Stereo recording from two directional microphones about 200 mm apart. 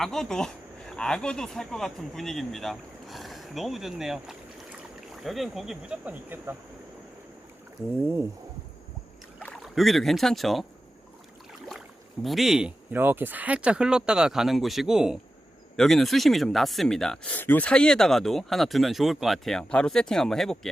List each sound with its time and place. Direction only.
0.0 s speech: centre (ahead or behind)
9.4 s speech: 5° left (ahead or behind)
12.2 s speech: centre (ahead or behind)